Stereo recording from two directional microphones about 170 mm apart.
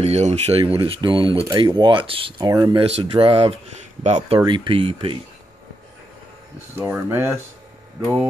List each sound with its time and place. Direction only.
0.0 s speech: 40° right (ahead or behind)
2.3 s speech: 20° right (ahead or behind); by 4.4 s 40° right (ahead or behind)
4.5 s speech: 30° right (ahead or behind)
6.7 s speech: 15° right (ahead or behind)